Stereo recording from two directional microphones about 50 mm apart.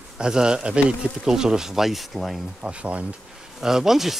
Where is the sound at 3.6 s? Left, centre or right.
Centre.